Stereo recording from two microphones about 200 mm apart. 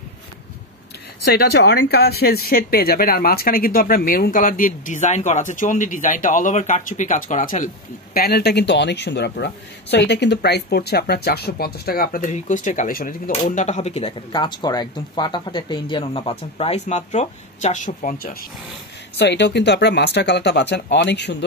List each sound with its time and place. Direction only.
1.3 s speech: 55° left (ahead or behind)
19.1 s speech: 60° left (ahead or behind)